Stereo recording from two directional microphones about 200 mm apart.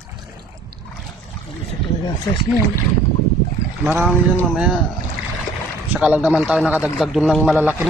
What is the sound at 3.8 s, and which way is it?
Speech, 10° right (ahead or behind).